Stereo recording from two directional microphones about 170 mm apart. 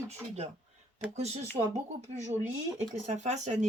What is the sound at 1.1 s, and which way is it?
A woman's voice, 40° right (ahead or behind).